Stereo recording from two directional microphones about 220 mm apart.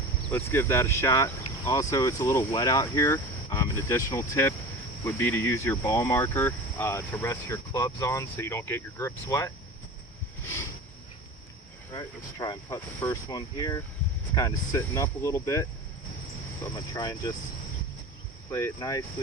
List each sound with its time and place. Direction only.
0.3 s speech: 10° left (ahead or behind)
11.9 s speech: 20° left (ahead or behind)
16.7 s speech: 15° left (ahead or behind)
18.5 s speech: 15° left (ahead or behind)